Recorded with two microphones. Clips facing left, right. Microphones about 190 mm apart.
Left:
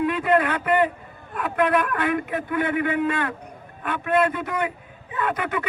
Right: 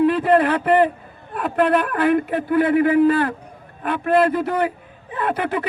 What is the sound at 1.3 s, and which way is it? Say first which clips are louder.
Speech: right 4 dB; 30° right (ahead or behind).